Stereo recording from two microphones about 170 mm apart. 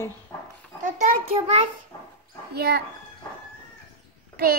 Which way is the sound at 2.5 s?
70° right (ahead or behind).